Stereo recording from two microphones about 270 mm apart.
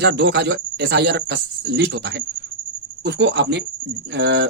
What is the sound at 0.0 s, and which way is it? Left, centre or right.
Speech, right.